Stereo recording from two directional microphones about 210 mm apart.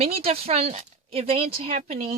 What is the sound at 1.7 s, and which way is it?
Speech, 35° right (ahead or behind).